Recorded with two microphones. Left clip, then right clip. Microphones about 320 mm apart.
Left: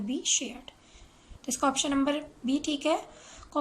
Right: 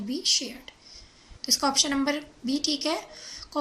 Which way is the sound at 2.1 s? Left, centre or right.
Centre.